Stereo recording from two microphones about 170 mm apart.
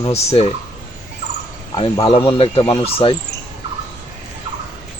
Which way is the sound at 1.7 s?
30° left (ahead or behind).